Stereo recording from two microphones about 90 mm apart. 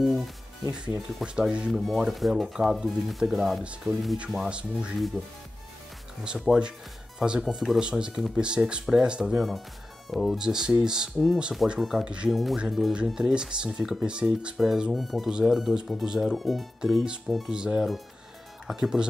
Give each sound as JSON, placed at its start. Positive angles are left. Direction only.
{"t": 0.0, "sound": "music", "side_deg": 0}
{"t": 0.7, "sound": "speech", "side_deg": -10}
{"t": 3.9, "sound": "speech", "side_deg": -35}
{"t": 4.3, "sound": "speech", "side_deg": -5}